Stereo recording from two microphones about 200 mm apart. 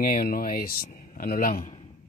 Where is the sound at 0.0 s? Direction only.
45° left (ahead or behind).